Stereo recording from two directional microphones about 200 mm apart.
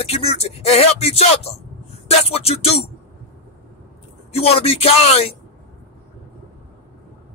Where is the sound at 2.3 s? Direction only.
30° left (ahead or behind).